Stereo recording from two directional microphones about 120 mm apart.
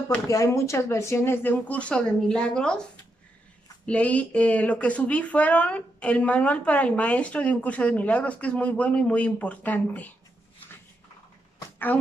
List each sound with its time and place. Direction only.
0.3 s speech: 25° left (ahead or behind)